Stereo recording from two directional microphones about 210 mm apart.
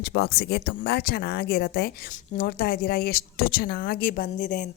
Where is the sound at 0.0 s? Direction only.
50° left (ahead or behind).